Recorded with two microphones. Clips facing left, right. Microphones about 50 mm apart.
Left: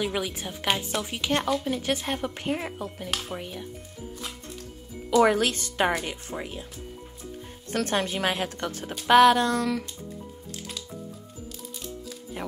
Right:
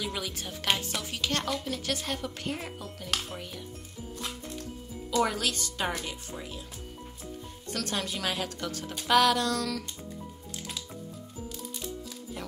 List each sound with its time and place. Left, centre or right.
0.0 s a woman's voice: left
5.2 s speech: left
7.7 s speech: left